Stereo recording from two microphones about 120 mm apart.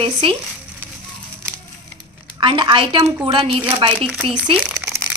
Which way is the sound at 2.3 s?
45° right (ahead or behind).